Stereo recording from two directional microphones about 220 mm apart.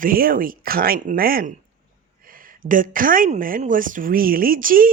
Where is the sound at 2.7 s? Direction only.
40° right (ahead or behind).